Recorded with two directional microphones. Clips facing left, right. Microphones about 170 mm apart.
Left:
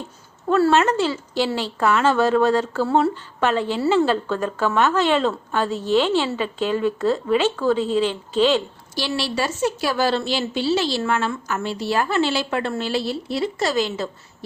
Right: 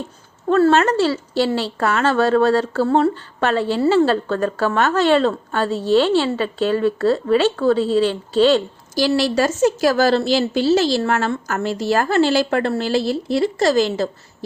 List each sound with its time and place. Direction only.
0.6 s a woman's voice: 35° right (ahead or behind)